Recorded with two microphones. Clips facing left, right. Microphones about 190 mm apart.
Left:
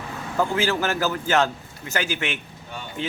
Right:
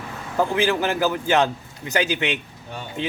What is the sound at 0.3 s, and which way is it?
A man's voice, 15° right (ahead or behind).